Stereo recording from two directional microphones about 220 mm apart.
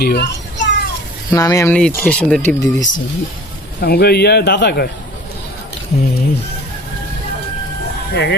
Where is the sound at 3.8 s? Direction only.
45° left (ahead or behind).